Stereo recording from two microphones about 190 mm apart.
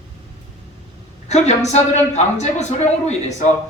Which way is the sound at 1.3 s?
35° left (ahead or behind).